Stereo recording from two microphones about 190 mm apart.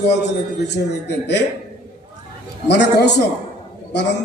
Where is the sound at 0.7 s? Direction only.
65° left (ahead or behind).